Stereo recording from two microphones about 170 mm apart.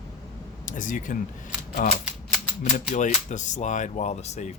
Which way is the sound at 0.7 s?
50° left (ahead or behind).